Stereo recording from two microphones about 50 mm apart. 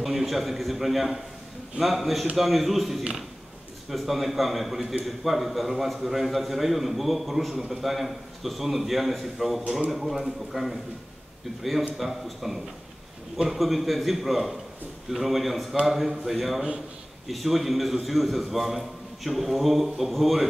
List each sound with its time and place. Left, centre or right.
0.0 s a man's voice: centre
3.0 s speech: centre
3.9 s a man's voice: centre